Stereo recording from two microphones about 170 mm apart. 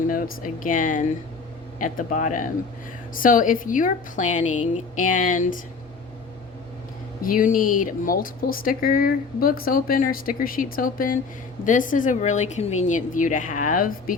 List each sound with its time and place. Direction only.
0.1 s a woman's voice: 55° left (ahead or behind)
7.2 s a woman's voice: 55° left (ahead or behind)